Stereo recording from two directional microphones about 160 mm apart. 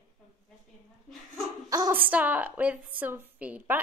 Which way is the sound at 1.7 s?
20° right (ahead or behind).